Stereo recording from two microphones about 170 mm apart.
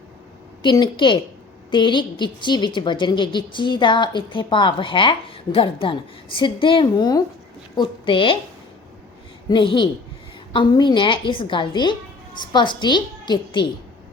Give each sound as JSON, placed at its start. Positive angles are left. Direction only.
{"t": 0.6, "sound": "a woman's voice", "side_deg": 25}
{"t": 9.5, "sound": "a woman's voice", "side_deg": 25}